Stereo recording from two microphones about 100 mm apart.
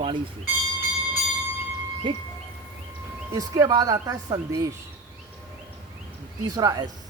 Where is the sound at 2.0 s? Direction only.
55° right (ahead or behind).